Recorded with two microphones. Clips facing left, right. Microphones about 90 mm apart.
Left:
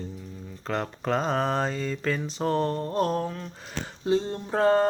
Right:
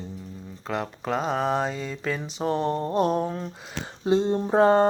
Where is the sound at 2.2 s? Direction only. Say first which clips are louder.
Right 1 dB; 15° right (ahead or behind).